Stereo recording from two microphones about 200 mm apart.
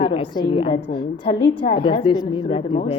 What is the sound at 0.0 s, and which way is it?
A woman's voice, 25° left (ahead or behind).